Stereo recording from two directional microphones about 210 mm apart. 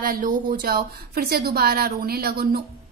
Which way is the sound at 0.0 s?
45° right (ahead or behind).